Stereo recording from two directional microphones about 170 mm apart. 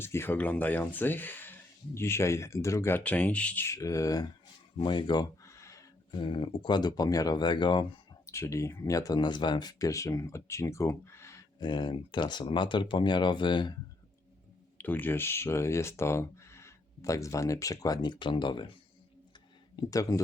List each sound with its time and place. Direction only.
0.0 s speech: 15° left (ahead or behind)
8.3 s speech: 15° left (ahead or behind)
14.8 s speech: 10° left (ahead or behind); by 18.7 s 30° left (ahead or behind)
19.7 s speech: 20° left (ahead or behind)